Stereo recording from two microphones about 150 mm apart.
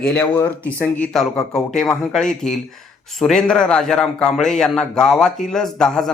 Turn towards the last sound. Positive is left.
turn(degrees=5)  # may be behind; listen again after turning